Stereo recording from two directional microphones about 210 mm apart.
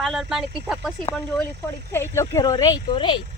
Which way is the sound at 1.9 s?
10° left (ahead or behind).